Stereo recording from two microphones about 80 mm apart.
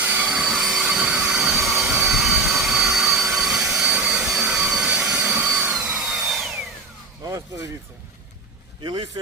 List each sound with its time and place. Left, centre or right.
0.0 s train: centre
0.4 s train: centre
4.0 s vacuum cleaner: centre
4.5 s jet engine: centre
5.5 s a sound: centre
8.8 s speech: right